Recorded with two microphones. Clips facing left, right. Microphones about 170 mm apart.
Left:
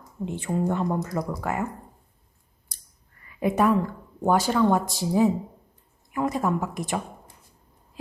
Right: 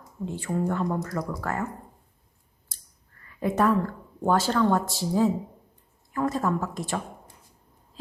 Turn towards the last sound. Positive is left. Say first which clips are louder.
# left 1 dB
turn(degrees=15)  # may be behind; listen again after turning